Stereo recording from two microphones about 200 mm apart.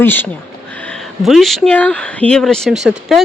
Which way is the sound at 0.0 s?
10° left (ahead or behind).